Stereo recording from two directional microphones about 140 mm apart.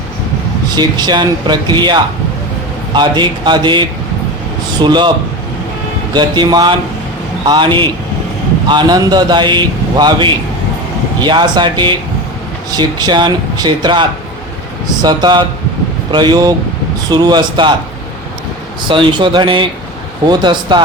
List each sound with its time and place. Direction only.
0.8 s a man's voice: 30° right (ahead or behind)
6.1 s a man's voice: 30° right (ahead or behind)
18.9 s a man's voice: 35° right (ahead or behind)